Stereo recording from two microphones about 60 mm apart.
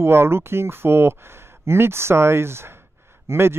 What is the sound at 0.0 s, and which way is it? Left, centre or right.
Speech, right.